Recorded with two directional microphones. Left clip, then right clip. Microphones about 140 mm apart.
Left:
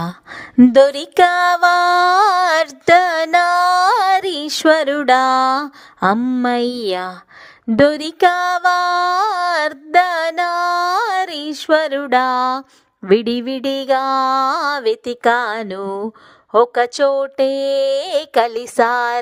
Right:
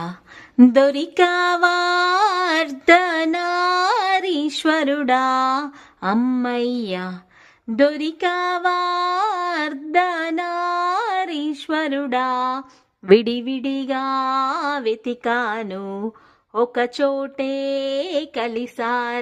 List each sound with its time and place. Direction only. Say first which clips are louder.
0.7 s a sound: left 5 dB; 45° left (ahead or behind)
6.1 s speech: left 1 dB; 15° left (ahead or behind)
6.4 s music: left 5 dB; 50° left (ahead or behind)
13.1 s speech: even; centre (ahead or behind)
13.4 s music: left 5 dB; 50° left (ahead or behind)
16.5 s speech: left 7 dB; 50° left (ahead or behind)